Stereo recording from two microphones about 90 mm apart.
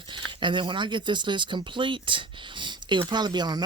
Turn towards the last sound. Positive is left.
turn(degrees=-50)  # may be behind; listen again after turning